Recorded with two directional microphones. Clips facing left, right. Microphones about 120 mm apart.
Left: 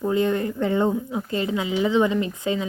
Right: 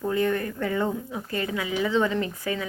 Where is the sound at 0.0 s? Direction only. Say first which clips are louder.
Left 3 dB; 20° left (ahead or behind).